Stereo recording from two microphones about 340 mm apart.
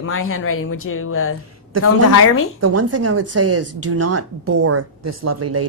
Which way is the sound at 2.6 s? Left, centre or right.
Right.